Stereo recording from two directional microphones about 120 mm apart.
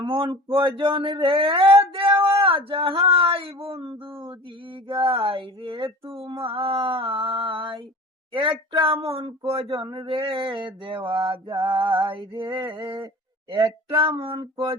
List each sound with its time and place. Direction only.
0.0 s a sound: 40° right (ahead or behind)
0.5 s speech: 45° right (ahead or behind)
9.6 s speech: 35° right (ahead or behind)
10.2 s speech: 45° right (ahead or behind)